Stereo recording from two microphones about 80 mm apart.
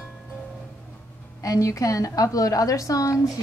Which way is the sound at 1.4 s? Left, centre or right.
Left.